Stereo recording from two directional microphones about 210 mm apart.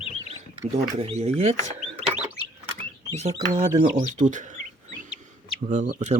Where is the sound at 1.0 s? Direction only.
30° right (ahead or behind).